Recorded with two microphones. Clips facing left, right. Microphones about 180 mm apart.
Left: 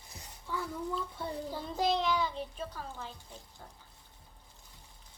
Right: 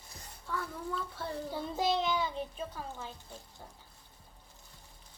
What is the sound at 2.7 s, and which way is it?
Speech, 15° right (ahead or behind).